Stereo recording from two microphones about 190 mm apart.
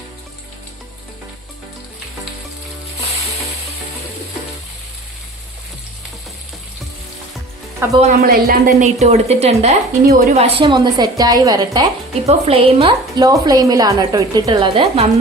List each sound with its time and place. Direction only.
7.8 s speech: 15° right (ahead or behind)
8.2 s speech: 50° right (ahead or behind)
9.0 s a woman's voice: 35° right (ahead or behind)
12.2 s a woman's voice: 30° right (ahead or behind)